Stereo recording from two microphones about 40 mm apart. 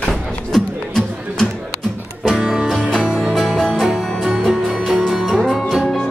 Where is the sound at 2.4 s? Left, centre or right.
Centre.